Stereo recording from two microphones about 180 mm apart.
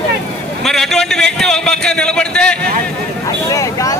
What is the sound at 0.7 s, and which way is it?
A man's voice, centre (ahead or behind).